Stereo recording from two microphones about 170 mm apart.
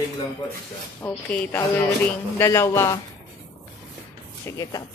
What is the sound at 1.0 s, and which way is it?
Speech, 15° left (ahead or behind).